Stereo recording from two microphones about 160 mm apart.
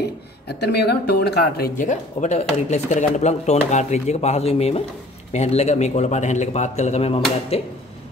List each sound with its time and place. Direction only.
0.6 s speech: 90° left
1.8 s speech: 50° left (ahead or behind)